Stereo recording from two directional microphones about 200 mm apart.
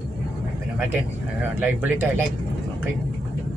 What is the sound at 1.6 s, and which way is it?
Speech, 10° right (ahead or behind).